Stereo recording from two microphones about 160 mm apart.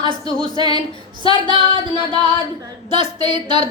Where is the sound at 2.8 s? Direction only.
45° left (ahead or behind).